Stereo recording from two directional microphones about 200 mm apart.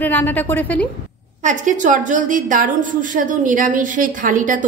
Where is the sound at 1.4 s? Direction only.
40° right (ahead or behind).